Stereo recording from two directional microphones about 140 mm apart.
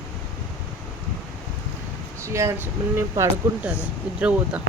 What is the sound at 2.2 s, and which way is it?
Speech, 20° right (ahead or behind).